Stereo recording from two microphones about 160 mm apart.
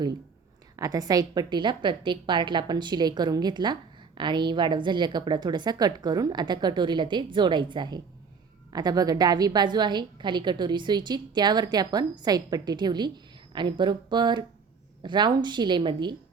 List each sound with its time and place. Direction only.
0.8 s a woman's voice: 25° right (ahead or behind)